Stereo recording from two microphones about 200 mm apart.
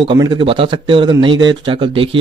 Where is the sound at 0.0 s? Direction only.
20° right (ahead or behind).